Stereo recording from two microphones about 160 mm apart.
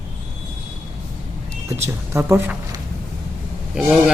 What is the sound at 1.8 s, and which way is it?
Speech, 15° right (ahead or behind).